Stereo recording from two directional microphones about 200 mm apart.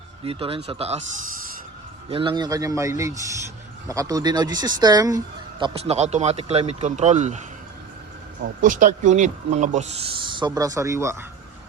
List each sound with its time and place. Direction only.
0.3 s speech: 30° right (ahead or behind)
2.0 s speech: 25° right (ahead or behind)
8.6 s speech: 40° right (ahead or behind); by 11.3 s 15° right (ahead or behind)